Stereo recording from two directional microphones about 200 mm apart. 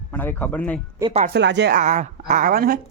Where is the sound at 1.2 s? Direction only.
60° right (ahead or behind).